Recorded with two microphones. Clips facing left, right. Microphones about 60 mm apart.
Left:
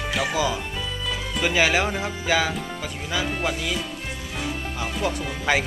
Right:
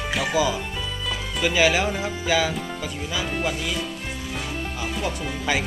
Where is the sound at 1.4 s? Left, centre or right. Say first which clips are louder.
Right 1 dB; left.